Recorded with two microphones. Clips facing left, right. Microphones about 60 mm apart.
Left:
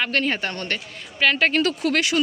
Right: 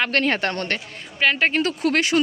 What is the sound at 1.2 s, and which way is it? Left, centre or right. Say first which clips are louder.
Speech: even; centre.